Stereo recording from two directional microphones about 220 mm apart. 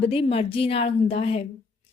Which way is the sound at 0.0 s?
25° left (ahead or behind).